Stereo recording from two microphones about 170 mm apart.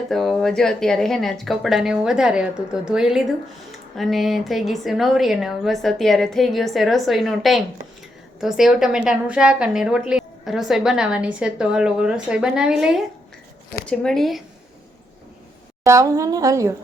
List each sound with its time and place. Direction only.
0.1 s speech: centre (ahead or behind)
15.8 s a woman's voice: 20° right (ahead or behind)